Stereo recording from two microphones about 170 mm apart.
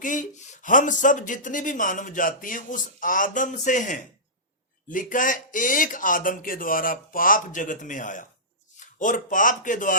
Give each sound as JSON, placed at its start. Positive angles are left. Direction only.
{"t": 0.0, "sound": "speech", "side_deg": 50}